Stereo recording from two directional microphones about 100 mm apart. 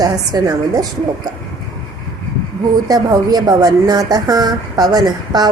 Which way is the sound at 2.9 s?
40° right (ahead or behind).